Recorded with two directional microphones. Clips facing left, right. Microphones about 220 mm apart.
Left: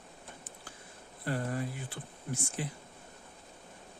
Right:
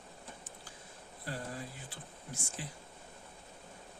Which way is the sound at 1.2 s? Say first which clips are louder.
Left 8 dB; 60° left (ahead or behind).